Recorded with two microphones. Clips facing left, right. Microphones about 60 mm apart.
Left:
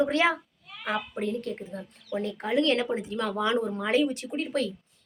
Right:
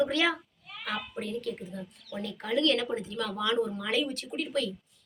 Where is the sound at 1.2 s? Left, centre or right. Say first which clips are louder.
Left 4 dB; left; by 3.2 s centre.